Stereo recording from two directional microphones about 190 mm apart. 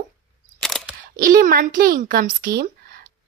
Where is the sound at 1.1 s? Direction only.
45° right (ahead or behind).